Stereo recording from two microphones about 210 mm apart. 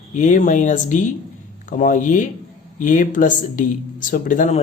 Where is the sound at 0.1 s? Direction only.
35° left (ahead or behind).